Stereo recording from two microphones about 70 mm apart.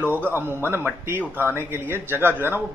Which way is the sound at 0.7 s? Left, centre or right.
Right.